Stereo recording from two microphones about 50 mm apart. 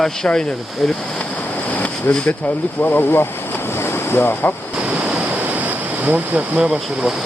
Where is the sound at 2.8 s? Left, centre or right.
Left.